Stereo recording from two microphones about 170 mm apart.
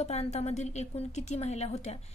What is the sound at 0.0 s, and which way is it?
A woman's voice, 40° left (ahead or behind).